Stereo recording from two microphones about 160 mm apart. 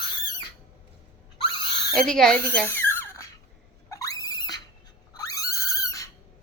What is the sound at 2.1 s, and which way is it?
A child's voice, 5° left (ahead or behind).